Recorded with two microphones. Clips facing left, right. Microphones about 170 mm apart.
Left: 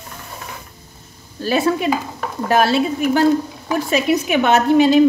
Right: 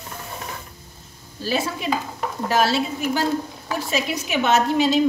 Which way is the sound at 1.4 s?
60° left (ahead or behind).